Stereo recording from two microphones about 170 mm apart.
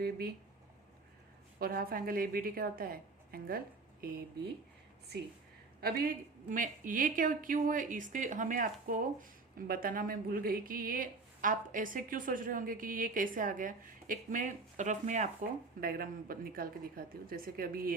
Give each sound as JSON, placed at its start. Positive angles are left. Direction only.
{"t": 0.0, "sound": "speech", "side_deg": -60}
{"t": 1.5, "sound": "speech", "side_deg": -60}
{"t": 6.5, "sound": "a woman's voice", "side_deg": -50}